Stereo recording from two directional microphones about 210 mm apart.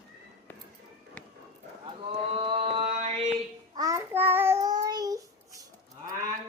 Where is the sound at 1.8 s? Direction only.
25° right (ahead or behind).